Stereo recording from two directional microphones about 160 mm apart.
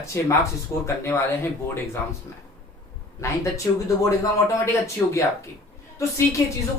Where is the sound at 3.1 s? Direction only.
20° left (ahead or behind).